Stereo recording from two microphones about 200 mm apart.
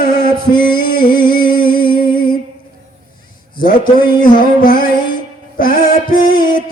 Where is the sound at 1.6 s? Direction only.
45° left (ahead or behind).